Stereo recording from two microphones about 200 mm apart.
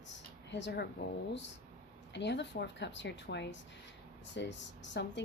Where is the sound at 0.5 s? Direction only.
60° left (ahead or behind).